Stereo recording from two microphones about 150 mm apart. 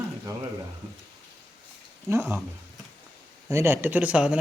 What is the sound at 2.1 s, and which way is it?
Speech, 20° right (ahead or behind).